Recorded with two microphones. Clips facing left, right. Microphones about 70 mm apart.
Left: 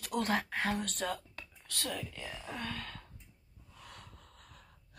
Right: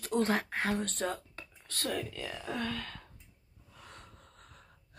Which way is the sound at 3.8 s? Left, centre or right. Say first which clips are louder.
Even; right.